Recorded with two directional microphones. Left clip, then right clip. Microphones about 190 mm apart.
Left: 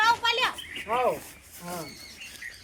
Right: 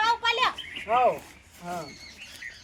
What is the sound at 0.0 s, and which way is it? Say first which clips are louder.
Bird: left 1 dB; 20° right (ahead or behind).